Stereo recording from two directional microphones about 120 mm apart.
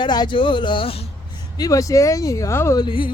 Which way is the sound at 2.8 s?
45° left (ahead or behind).